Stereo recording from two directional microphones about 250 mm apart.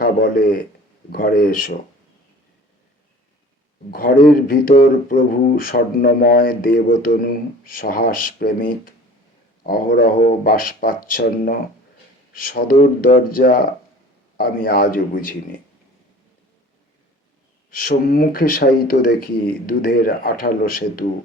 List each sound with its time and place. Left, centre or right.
0.0 s a man's voice: left
4.4 s speech: left
17.7 s speech: left